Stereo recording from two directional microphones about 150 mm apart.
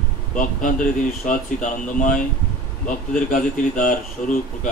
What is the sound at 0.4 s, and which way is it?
Speech, 60° left (ahead or behind).